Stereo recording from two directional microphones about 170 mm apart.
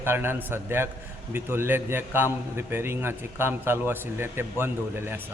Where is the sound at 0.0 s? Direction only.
15° right (ahead or behind).